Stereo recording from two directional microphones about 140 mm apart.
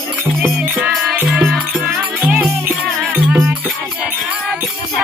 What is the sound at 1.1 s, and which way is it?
Music, 10° right (ahead or behind).